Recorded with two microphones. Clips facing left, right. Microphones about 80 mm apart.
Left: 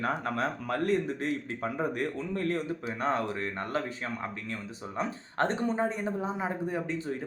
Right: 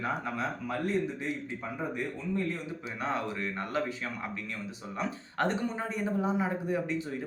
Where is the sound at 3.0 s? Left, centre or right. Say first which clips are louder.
Left 2 dB; left.